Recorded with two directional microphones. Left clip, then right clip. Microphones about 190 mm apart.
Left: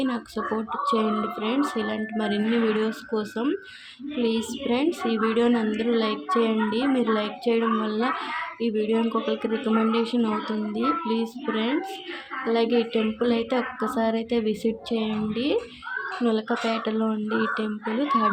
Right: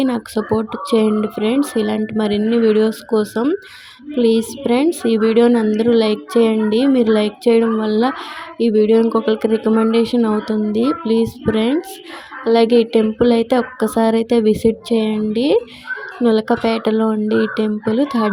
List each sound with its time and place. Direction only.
0.0 s a woman's voice: 35° right (ahead or behind)